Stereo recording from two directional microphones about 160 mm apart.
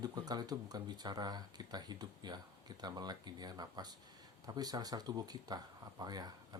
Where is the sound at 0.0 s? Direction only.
25° right (ahead or behind).